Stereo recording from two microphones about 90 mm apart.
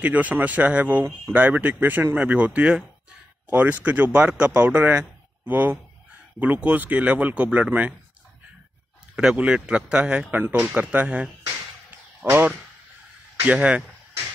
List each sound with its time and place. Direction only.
0.0 s speech: 15° right (ahead or behind)
9.1 s speech: 10° right (ahead or behind)
12.3 s speech: 20° right (ahead or behind)